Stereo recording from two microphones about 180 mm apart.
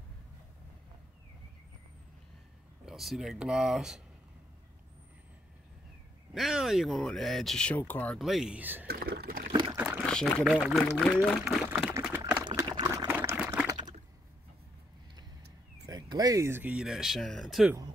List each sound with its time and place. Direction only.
2.8 s speech: centre (ahead or behind)
6.3 s speech: centre (ahead or behind)
8.8 s liquid: 60° right (ahead or behind)
9.5 s pour: 25° right (ahead or behind)
9.8 s a sound: 10° right (ahead or behind)
10.0 s pour: 5° left (ahead or behind)
10.4 s speech: centre (ahead or behind)
12.1 s a sound: 10° right (ahead or behind)
12.4 s liquid: 25° right (ahead or behind)
15.9 s speech: 20° right (ahead or behind); by 17.7 s centre (ahead or behind)